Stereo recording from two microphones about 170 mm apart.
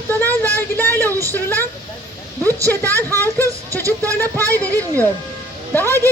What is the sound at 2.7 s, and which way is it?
Speech, 10° left (ahead or behind).